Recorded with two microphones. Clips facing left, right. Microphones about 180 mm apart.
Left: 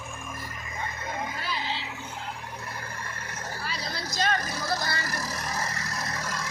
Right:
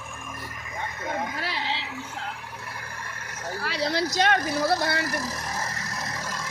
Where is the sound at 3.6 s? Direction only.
75° right (ahead or behind).